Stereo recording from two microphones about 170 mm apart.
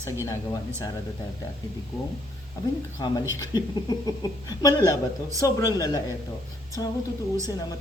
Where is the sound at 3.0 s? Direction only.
25° left (ahead or behind).